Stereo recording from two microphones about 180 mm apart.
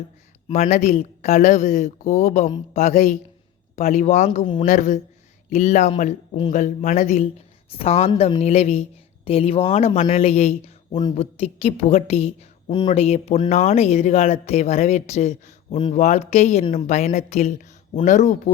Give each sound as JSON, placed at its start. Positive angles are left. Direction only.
{"t": 0.4, "sound": "speech", "side_deg": 35}